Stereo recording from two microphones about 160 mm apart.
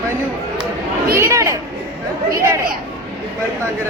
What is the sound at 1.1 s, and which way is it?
Speech, 15° right (ahead or behind).